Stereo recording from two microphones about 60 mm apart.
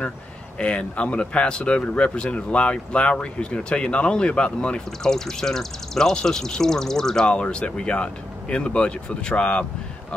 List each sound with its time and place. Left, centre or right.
0.6 s speech: centre